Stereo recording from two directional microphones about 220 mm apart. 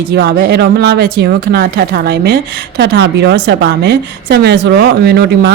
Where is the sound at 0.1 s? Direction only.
45° right (ahead or behind).